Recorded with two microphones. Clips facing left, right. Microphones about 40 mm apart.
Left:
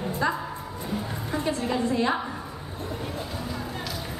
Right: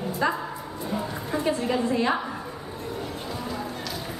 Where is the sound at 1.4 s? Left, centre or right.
Centre.